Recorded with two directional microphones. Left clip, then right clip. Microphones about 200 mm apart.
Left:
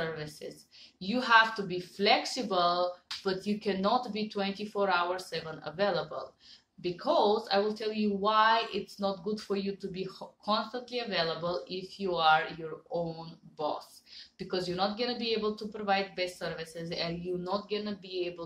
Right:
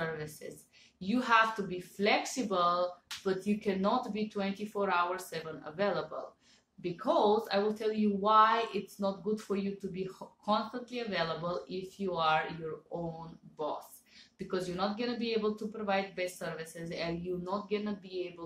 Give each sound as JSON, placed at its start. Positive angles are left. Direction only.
{"t": 1.0, "sound": "speech", "side_deg": 15}
{"t": 14.5, "sound": "speech", "side_deg": 15}